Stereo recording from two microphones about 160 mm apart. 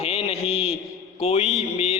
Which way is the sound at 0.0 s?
40° left (ahead or behind).